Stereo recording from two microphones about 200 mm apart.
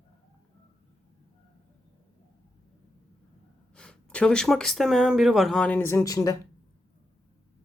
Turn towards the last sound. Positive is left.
turn(degrees=15)  # may be behind; listen again after turning